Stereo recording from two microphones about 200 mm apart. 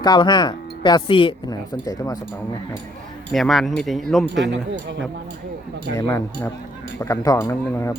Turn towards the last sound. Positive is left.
turn(degrees=15)  # may be behind; listen again after turning